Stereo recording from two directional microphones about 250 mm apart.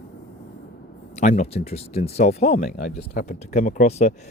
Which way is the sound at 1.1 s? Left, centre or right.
Left.